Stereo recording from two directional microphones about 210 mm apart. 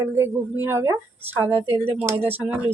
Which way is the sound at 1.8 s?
25° right (ahead or behind).